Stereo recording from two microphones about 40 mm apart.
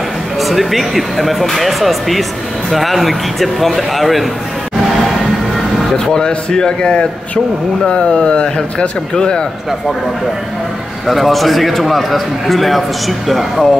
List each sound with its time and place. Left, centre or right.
0.4 s a man's voice: centre
6.1 s a man's voice: centre
11.1 s a man's voice: centre